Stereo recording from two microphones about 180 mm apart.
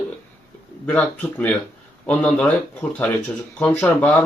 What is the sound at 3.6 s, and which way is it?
Speech, 5° left (ahead or behind).